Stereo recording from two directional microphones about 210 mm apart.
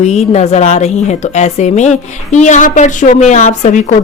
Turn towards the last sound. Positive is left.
turn(degrees=35)  # may be behind; listen again after turning